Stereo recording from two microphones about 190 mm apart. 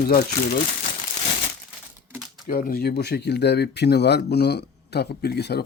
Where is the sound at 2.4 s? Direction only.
50° left (ahead or behind).